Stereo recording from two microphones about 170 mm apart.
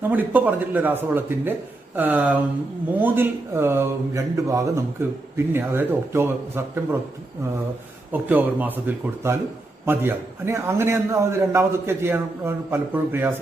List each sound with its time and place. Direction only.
0.1 s a man's voice: 10° right (ahead or behind)
8.1 s a man's voice: 10° right (ahead or behind)